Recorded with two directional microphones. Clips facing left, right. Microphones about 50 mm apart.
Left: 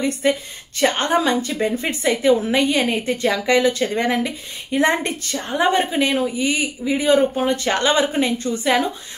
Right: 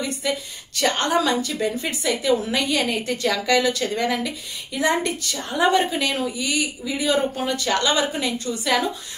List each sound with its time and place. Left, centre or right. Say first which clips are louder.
0.0 s a woman's voice: left 6 dB; left